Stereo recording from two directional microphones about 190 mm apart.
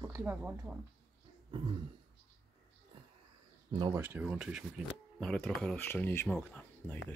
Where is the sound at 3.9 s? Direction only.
10° right (ahead or behind); by 7.0 s 10° left (ahead or behind).